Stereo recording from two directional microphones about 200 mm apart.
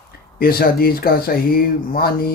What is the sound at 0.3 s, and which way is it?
Speech, 50° left (ahead or behind).